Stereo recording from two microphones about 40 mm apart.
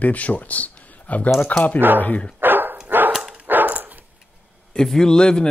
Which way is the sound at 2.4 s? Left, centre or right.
Right.